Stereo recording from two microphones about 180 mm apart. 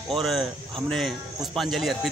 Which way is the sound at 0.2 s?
Centre (ahead or behind).